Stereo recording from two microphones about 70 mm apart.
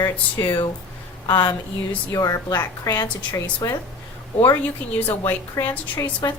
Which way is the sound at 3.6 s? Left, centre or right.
Left.